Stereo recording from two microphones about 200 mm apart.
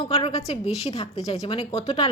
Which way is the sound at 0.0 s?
25° left (ahead or behind).